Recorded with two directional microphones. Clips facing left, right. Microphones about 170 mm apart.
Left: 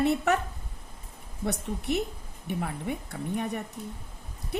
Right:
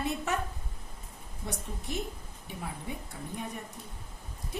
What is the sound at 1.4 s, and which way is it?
Speech, 70° left (ahead or behind).